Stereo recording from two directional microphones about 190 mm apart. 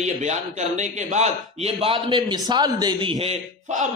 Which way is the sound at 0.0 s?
35° right (ahead or behind).